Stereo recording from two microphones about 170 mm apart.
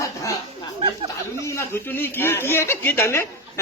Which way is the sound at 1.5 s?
15° left (ahead or behind).